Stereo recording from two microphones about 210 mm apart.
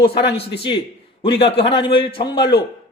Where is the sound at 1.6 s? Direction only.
25° left (ahead or behind).